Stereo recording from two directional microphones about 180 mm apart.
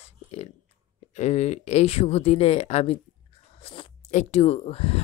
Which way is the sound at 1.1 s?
40° left (ahead or behind).